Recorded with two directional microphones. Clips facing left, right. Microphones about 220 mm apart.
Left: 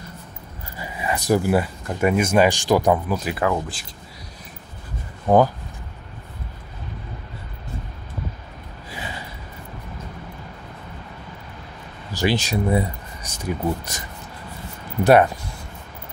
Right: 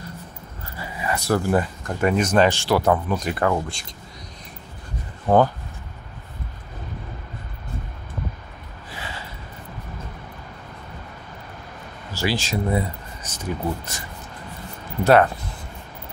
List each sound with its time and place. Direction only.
0.7 s speech: 15° left (ahead or behind)
3.1 s speech: 5° left (ahead or behind)
5.3 s speech: 10° left (ahead or behind)
8.9 s a sound: 15° left (ahead or behind)
12.1 s speech: 20° left (ahead or behind)
15.0 s speech: 15° left (ahead or behind)